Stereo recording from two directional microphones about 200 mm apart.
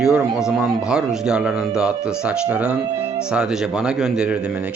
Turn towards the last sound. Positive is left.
turn(degrees=-5)  # may be behind; listen again after turning